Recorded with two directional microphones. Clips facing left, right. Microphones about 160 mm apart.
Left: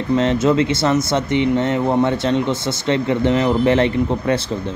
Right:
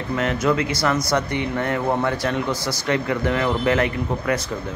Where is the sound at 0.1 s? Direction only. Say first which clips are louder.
Left 5 dB; 25° left (ahead or behind).